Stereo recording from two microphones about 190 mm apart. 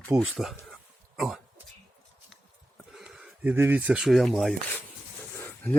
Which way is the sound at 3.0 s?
5° right (ahead or behind).